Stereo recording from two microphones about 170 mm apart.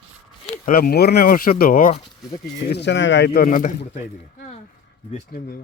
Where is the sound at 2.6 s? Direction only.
85° left; by 3.7 s 55° left (ahead or behind).